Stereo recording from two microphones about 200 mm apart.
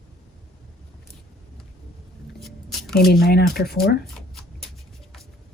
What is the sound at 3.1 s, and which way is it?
Speech, 50° left (ahead or behind).